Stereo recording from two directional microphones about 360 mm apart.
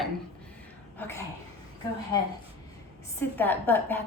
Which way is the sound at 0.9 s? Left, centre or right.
Centre.